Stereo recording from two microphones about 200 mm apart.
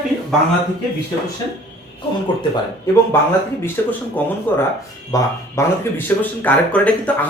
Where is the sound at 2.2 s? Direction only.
20° left (ahead or behind).